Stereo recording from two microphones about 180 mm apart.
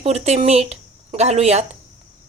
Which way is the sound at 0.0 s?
35° right (ahead or behind).